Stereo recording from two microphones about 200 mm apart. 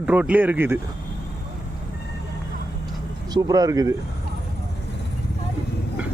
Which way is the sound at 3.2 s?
20° right (ahead or behind).